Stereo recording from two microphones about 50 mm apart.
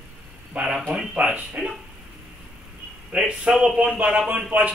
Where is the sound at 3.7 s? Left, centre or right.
Right.